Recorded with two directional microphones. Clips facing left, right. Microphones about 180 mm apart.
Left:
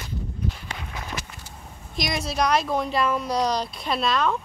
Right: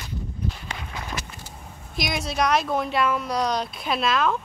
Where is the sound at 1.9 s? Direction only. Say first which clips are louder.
Even; centre (ahead or behind).